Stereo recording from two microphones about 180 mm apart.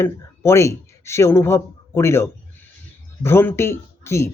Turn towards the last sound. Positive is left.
turn(degrees=15)  # may be behind; listen again after turning